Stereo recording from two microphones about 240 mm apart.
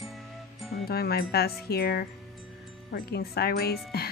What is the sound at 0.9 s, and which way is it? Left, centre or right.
Speech, left.